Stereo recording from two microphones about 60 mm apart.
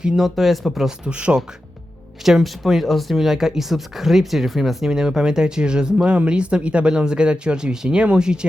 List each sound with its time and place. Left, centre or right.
0.0 s speech: centre
1.0 s speech: centre
2.2 s speech: centre
4.9 s speech: centre